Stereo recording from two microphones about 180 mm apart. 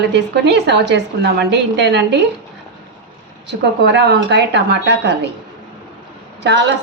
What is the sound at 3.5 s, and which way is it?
A woman's voice, 75° right (ahead or behind).